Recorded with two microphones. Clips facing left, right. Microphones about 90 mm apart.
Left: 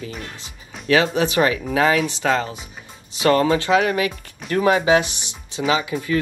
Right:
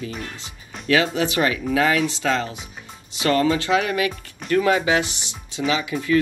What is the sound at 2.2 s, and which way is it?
Speech, 40° left (ahead or behind).